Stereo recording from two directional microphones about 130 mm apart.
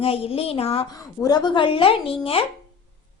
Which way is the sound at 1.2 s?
30° left (ahead or behind).